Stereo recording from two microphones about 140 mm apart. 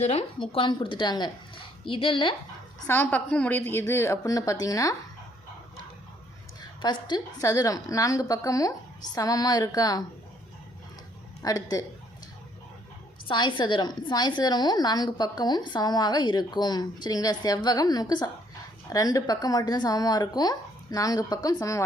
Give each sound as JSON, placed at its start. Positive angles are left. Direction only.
{"t": 0.0, "sound": "a woman's voice", "side_deg": 45}
{"t": 2.8, "sound": "a woman's voice", "side_deg": 15}
{"t": 6.6, "sound": "a woman's voice", "side_deg": 30}
{"t": 11.4, "sound": "a woman's voice", "side_deg": 25}
{"t": 13.2, "sound": "a woman's voice", "side_deg": 35}